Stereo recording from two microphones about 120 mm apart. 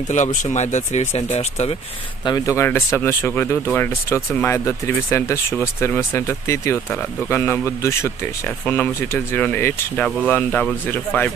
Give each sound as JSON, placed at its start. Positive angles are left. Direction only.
{"t": 0.1, "sound": "speech", "side_deg": 90}
{"t": 2.2, "sound": "speech", "side_deg": 30}